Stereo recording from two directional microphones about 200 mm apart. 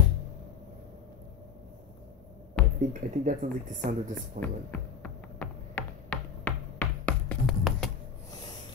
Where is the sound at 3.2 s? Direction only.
40° right (ahead or behind).